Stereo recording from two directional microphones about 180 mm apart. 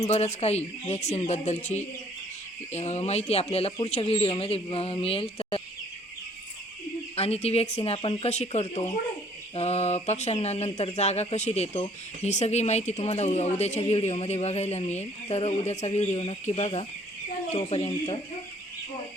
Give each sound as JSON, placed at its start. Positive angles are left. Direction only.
{"t": 0.0, "sound": "speech", "side_deg": 35}
{"t": 7.2, "sound": "speech", "side_deg": 35}